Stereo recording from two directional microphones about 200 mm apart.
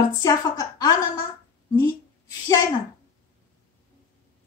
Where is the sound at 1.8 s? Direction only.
20° left (ahead or behind).